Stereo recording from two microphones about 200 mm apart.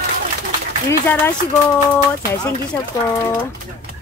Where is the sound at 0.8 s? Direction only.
10° left (ahead or behind).